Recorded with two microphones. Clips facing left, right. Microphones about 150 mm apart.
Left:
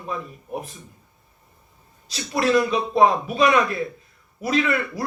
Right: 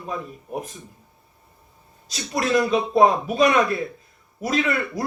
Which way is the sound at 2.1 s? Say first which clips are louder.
Left 2 dB; 45° right (ahead or behind).